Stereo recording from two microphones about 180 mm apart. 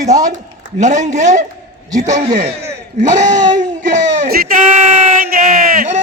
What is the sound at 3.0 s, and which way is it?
Speech, 40° right (ahead or behind).